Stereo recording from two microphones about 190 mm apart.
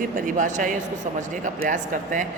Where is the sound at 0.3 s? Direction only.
40° right (ahead or behind).